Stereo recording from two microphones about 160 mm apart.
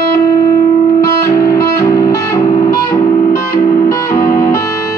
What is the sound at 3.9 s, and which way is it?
Music, 20° left (ahead or behind).